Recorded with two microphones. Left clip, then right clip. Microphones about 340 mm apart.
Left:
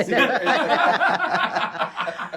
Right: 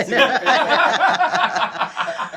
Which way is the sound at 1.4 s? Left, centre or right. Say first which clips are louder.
Right 4 dB; centre.